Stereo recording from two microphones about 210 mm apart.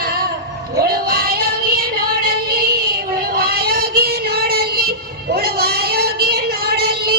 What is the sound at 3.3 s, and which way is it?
Child singing, 45° right (ahead or behind).